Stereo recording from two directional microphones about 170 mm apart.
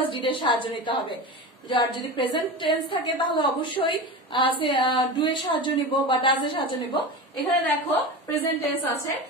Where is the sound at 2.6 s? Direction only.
30° left (ahead or behind).